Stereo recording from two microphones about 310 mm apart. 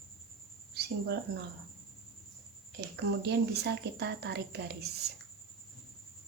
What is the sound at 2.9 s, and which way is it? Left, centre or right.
Speech, right.